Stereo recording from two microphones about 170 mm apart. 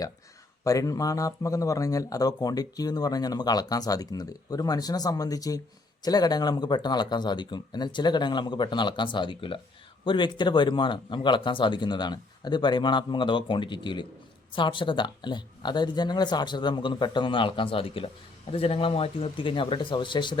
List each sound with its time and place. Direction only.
0.6 s speech: 20° left (ahead or behind)